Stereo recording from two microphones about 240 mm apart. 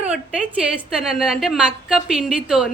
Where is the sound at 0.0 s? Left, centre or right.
Centre.